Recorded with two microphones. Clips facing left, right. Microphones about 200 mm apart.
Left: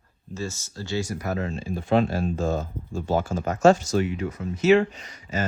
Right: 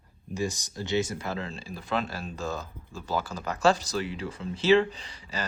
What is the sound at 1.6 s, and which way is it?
Speech, 40° left (ahead or behind).